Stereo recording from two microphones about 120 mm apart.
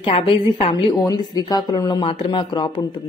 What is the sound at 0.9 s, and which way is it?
A woman's voice, 35° left (ahead or behind).